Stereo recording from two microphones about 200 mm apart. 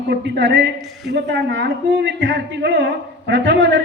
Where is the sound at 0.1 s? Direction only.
60° right (ahead or behind).